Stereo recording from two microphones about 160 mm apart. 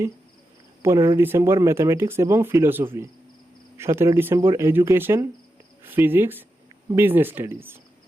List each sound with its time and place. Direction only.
0.8 s speech: 15° right (ahead or behind)